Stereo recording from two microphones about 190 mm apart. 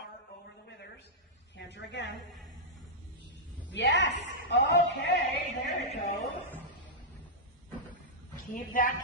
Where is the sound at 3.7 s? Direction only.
70° left (ahead or behind).